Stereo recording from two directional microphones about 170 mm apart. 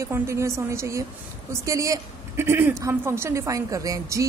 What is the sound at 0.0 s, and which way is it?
A woman's voice, 15° right (ahead or behind).